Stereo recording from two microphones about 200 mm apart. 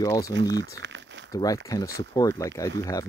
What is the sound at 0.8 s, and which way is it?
Crumpling, 65° right (ahead or behind).